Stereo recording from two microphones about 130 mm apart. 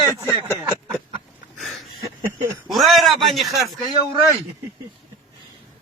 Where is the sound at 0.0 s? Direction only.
25° left (ahead or behind).